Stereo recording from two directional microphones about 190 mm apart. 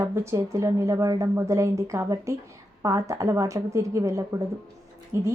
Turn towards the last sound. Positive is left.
turn(degrees=-15)  # may be behind; listen again after turning